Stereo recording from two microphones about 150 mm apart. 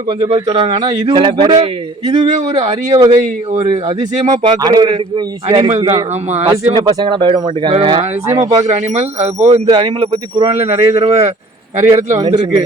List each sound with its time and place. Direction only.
0.3 s a man's voice: 25° right (ahead or behind)
3.1 s speech: 40° right (ahead or behind)
4.4 s a man's voice: 25° right (ahead or behind)
5.8 s speech: 40° right (ahead or behind)
6.7 s speech: 30° right (ahead or behind)
8.3 s a man's voice: 20° right (ahead or behind)
8.6 s speech: 50° right (ahead or behind)
9.6 s a man's voice: 30° right (ahead or behind)